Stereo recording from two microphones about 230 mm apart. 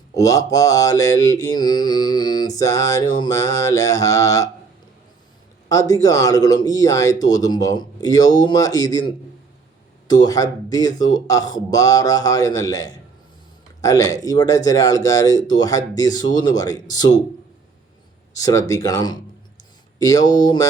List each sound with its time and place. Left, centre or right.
0.1 s mantra: centre
5.6 s mantra: centre
18.3 s mantra: centre